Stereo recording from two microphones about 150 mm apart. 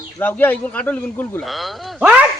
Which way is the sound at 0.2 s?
10° left (ahead or behind).